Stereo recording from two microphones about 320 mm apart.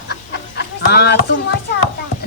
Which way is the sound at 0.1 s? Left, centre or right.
Left.